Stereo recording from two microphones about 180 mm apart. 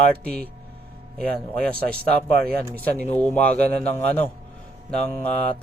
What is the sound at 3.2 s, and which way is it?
A man's voice, 10° left (ahead or behind).